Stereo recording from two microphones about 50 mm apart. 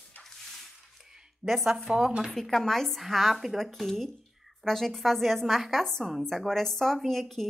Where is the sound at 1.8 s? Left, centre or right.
Centre.